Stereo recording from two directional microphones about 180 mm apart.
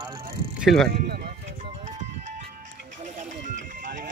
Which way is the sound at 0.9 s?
60° right (ahead or behind).